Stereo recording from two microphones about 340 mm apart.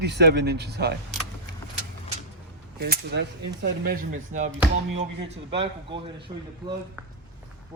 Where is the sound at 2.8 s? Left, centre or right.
Right.